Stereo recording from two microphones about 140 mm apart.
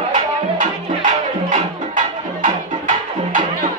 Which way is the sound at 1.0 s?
65° right (ahead or behind).